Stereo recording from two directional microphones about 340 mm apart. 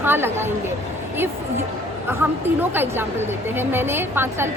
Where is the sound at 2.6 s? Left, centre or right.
Centre.